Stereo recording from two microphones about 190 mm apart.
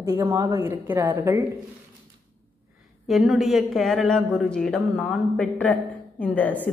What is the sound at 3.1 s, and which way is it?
A man's voice, centre (ahead or behind).